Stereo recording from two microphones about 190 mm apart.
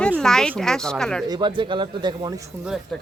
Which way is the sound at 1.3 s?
25° right (ahead or behind).